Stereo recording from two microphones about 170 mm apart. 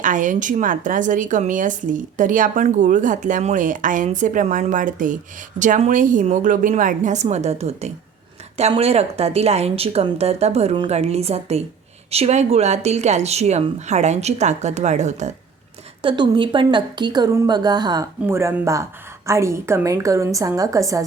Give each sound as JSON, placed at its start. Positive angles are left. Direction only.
{"t": 0.0, "sound": "speech", "side_deg": -50}
{"t": 16.0, "sound": "a woman's voice", "side_deg": -30}